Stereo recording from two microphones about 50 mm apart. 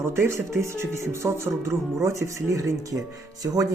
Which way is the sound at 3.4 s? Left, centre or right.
Right.